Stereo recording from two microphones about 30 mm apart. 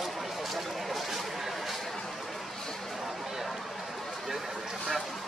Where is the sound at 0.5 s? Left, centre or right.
Centre.